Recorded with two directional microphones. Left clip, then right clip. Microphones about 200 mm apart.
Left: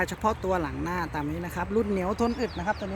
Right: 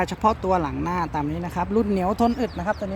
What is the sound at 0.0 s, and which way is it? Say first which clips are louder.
Speech: right 5 dB; 30° right (ahead or behind).